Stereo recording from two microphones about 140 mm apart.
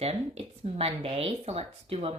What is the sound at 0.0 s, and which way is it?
Speech, 45° right (ahead or behind).